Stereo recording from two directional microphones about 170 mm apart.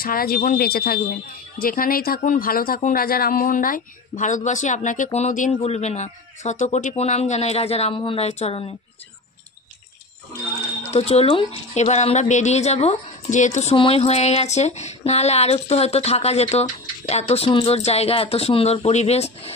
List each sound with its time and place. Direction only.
0.0 s speech: 60° left (ahead or behind); by 8.7 s 35° left (ahead or behind)
10.9 s speech: 40° left (ahead or behind)